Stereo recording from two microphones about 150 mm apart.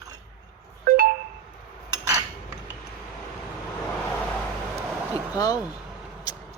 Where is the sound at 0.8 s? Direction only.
75° right (ahead or behind).